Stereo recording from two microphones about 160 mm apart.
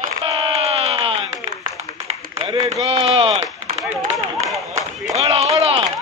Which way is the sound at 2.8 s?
40° right (ahead or behind).